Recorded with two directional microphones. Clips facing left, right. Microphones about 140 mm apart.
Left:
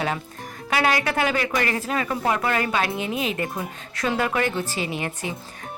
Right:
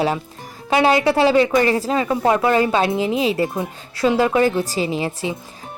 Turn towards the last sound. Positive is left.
turn(degrees=-30)  # may be behind; listen again after turning